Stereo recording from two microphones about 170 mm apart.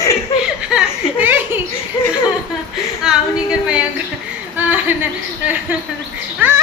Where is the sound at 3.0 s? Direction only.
5° right (ahead or behind).